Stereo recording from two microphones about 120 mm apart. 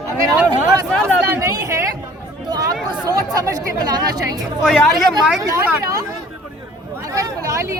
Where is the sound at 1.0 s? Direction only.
25° right (ahead or behind).